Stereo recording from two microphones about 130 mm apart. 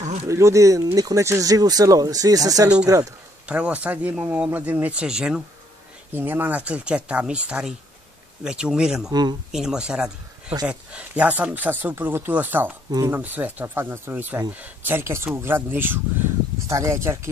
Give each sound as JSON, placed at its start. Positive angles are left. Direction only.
{"t": 0.0, "sound": "a sound", "side_deg": -60}
{"t": 0.3, "sound": "speech", "side_deg": -25}
{"t": 3.4, "sound": "speech", "side_deg": -10}
{"t": 9.1, "sound": "speech", "side_deg": -35}
{"t": 9.5, "sound": "speech", "side_deg": -5}